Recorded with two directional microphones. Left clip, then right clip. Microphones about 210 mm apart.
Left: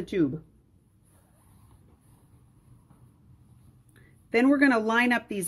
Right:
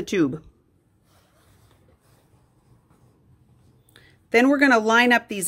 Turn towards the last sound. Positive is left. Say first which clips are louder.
# right 7 dB
turn(degrees=-15)  # may be behind; listen again after turning